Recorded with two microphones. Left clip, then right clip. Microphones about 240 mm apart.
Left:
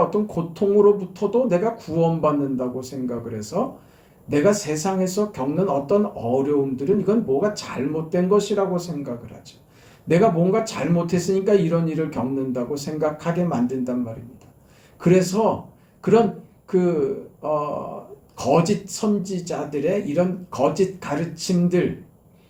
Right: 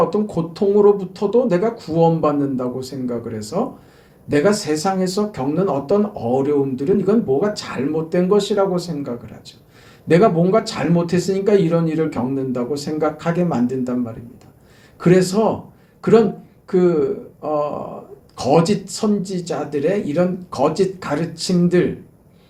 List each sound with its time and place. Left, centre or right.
0.1 s speech: centre
14.9 s a man's voice: centre